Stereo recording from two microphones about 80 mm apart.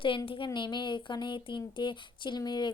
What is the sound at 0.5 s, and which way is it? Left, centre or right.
Speech, left.